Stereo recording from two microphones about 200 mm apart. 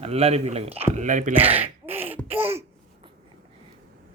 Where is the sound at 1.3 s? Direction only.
10° right (ahead or behind).